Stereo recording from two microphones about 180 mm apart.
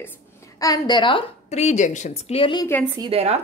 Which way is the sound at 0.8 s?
25° left (ahead or behind).